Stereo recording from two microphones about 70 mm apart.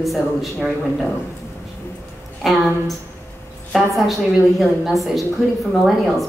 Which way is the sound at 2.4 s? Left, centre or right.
Centre.